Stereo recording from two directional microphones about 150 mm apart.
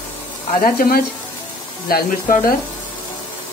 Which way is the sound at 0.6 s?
75° left (ahead or behind).